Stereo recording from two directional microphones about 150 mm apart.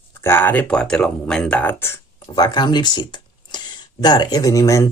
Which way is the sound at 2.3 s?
30° left (ahead or behind).